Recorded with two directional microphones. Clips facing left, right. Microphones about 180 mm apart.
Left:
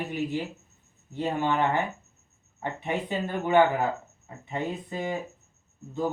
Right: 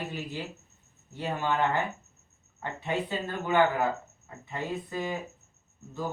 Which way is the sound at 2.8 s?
20° left (ahead or behind).